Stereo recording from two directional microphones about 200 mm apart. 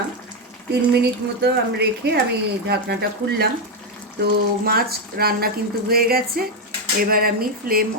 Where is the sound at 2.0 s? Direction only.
55° right (ahead or behind).